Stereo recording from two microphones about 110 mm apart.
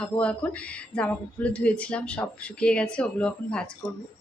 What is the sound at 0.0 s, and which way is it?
A woman's voice, 10° left (ahead or behind).